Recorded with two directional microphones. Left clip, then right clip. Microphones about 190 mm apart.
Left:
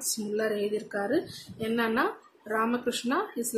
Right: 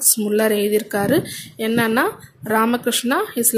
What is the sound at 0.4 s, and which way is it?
Speech, 50° right (ahead or behind).